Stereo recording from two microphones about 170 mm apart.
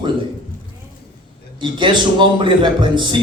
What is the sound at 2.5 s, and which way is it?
Speech, 30° right (ahead or behind).